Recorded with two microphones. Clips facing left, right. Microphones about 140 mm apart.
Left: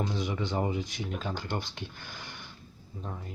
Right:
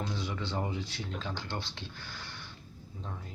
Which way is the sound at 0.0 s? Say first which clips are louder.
Left 4 dB; 20° left (ahead or behind).